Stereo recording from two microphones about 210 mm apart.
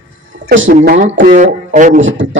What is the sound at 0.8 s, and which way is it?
A man's voice, 40° right (ahead or behind).